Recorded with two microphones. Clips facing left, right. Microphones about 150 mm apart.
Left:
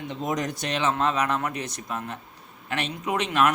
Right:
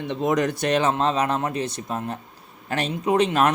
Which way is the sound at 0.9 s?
30° right (ahead or behind).